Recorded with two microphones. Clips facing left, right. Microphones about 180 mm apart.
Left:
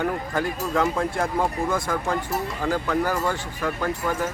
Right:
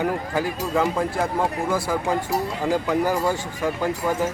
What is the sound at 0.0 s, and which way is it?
Speech, 5° right (ahead or behind).